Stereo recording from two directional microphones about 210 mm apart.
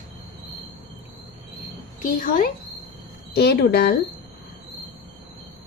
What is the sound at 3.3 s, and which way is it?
Speech, 50° left (ahead or behind).